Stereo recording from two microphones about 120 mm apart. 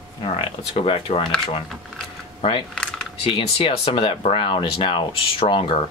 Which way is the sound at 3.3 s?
50° left (ahead or behind).